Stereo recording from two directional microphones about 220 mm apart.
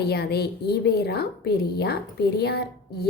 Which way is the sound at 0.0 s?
45° left (ahead or behind).